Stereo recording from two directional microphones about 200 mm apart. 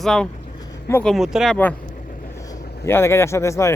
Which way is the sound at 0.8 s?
10° left (ahead or behind).